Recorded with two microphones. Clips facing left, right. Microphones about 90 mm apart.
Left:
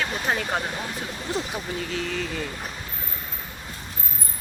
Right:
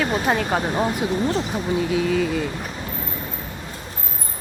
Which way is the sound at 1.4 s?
25° right (ahead or behind).